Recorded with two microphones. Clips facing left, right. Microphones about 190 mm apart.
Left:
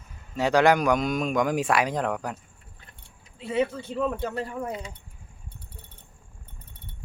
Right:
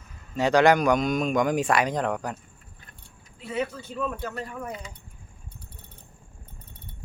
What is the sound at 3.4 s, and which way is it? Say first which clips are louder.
Speech: left 4 dB; 30° left (ahead or behind).